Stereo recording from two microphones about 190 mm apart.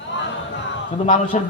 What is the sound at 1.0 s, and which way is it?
Speech, 35° left (ahead or behind).